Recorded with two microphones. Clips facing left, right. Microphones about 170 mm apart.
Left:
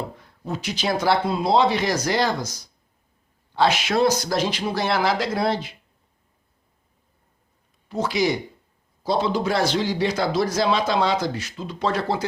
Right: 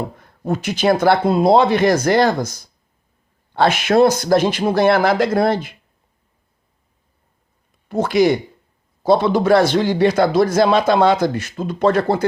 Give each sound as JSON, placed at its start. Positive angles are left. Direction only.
{"t": 0.2, "sound": "a man's voice", "side_deg": -50}
{"t": 7.9, "sound": "a man's voice", "side_deg": -55}